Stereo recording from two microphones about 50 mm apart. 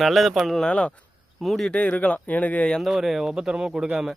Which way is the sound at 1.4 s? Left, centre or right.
Centre.